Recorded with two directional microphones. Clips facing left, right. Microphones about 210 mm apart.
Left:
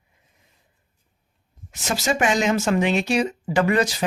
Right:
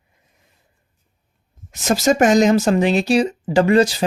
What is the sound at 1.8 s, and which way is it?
Speech, 40° right (ahead or behind).